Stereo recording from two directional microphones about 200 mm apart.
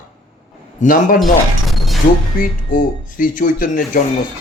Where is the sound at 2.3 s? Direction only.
45° left (ahead or behind).